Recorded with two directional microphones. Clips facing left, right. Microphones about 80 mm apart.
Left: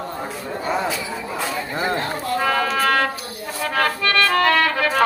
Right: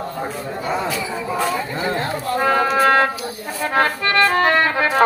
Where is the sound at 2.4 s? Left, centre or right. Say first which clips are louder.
Right 5 dB; right.